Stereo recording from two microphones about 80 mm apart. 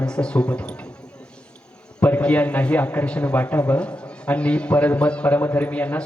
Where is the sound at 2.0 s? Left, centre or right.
Centre.